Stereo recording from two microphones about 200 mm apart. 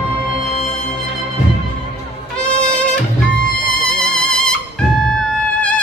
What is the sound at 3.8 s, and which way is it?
Music, 5° left (ahead or behind).